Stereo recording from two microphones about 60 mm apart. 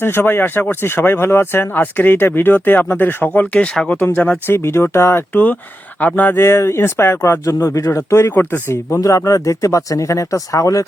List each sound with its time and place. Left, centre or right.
0.0 s speech: left
4.5 s speech: left
6.3 s speech: left
8.4 s speech: left
9.0 s speech: left